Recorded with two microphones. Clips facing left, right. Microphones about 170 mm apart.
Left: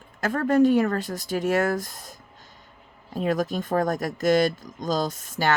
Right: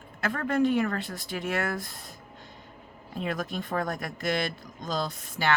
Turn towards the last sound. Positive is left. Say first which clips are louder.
# left 4 dB
turn(degrees=45)  # may be behind; listen again after turning